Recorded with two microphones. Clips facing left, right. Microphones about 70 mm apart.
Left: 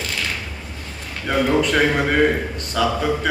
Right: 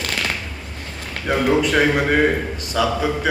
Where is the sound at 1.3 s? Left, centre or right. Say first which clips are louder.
Right 1 dB; centre.